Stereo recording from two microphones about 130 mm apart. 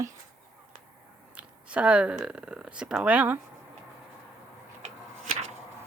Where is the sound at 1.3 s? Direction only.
10° right (ahead or behind).